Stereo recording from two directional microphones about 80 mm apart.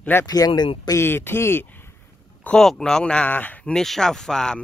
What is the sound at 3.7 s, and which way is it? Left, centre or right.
Speech, centre.